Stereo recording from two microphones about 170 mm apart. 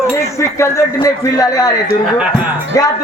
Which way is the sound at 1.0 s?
20° left (ahead or behind).